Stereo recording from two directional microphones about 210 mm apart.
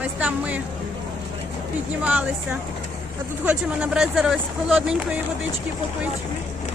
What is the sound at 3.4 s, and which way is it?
Speech, 5° right (ahead or behind).